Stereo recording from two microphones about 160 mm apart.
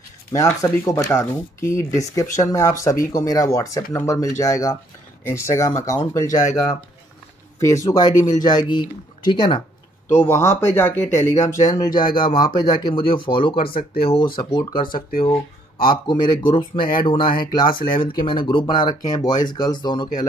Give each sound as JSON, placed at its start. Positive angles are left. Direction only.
{"t": 0.3, "sound": "speech", "side_deg": 20}
{"t": 10.2, "sound": "speech", "side_deg": 15}
{"t": 13.7, "sound": "speech", "side_deg": 70}
{"t": 14.0, "sound": "speech", "side_deg": 30}
{"t": 15.0, "sound": "speech", "side_deg": 60}
{"t": 15.8, "sound": "speech", "side_deg": 30}